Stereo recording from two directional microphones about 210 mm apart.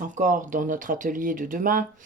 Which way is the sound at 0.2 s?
40° right (ahead or behind).